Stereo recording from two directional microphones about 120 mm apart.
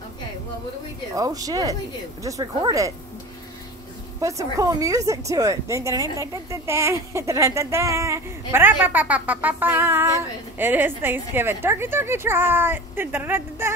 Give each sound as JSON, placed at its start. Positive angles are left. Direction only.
{"t": 1.1, "sound": "speech", "side_deg": -30}
{"t": 4.2, "sound": "speech", "side_deg": -25}